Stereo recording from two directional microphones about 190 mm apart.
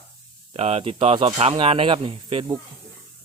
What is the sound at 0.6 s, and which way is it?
Speech, 30° right (ahead or behind).